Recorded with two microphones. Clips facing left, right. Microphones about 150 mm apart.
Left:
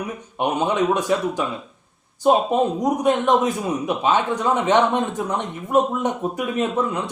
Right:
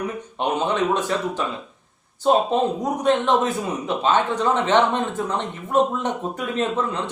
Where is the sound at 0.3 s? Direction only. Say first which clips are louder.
Left 2 dB; 10° left (ahead or behind).